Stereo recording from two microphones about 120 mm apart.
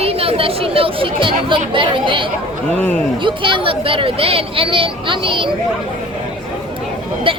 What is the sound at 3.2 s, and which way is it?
Speech, 45° right (ahead or behind).